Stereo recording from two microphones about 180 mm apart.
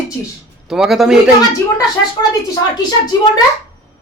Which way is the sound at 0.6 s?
Centre (ahead or behind).